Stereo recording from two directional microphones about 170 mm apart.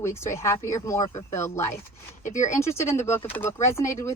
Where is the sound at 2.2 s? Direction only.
45° left (ahead or behind).